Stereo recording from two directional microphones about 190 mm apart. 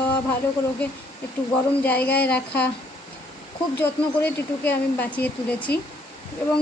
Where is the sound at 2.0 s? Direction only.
55° left (ahead or behind).